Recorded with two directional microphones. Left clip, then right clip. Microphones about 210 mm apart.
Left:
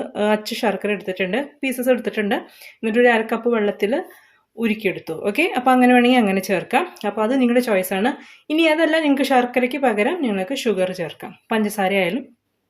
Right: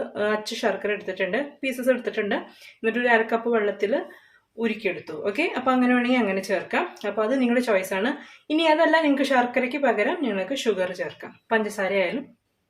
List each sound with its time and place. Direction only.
0.1 s speech: 45° left (ahead or behind)